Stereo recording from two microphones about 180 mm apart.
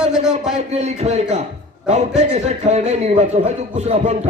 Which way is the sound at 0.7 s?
35° right (ahead or behind).